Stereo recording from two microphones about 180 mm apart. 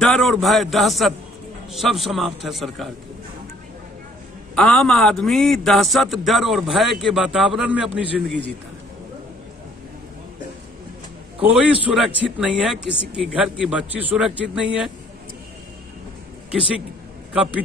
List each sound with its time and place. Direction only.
0.0 s a man's voice: centre (ahead or behind)
4.6 s a man's voice: 5° left (ahead or behind)
11.8 s a man's voice: 5° right (ahead or behind)
16.5 s a man's voice: 5° right (ahead or behind)